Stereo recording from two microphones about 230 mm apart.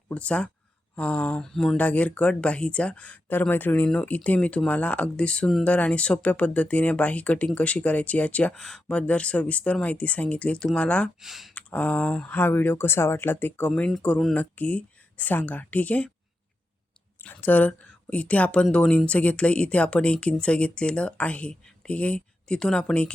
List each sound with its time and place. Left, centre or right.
0.1 s speech: centre
17.2 s speech: centre